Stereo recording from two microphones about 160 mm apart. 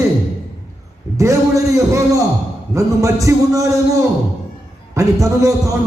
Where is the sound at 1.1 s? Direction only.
20° right (ahead or behind).